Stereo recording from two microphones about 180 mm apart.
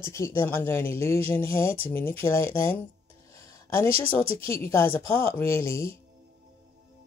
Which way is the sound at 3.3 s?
15° left (ahead or behind).